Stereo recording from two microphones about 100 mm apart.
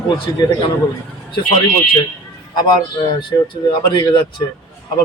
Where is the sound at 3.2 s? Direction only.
50° left (ahead or behind).